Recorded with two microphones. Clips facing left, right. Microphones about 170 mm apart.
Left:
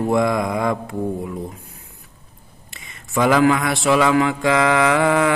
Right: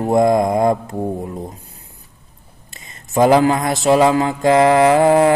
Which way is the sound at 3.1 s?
35° right (ahead or behind).